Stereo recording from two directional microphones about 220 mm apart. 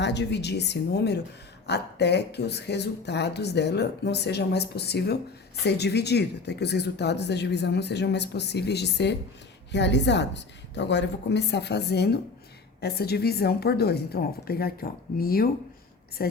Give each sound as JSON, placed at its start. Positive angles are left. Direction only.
{"t": 0.0, "sound": "speech", "side_deg": 50}